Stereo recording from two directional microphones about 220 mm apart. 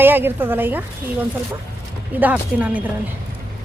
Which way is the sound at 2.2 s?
5° right (ahead or behind).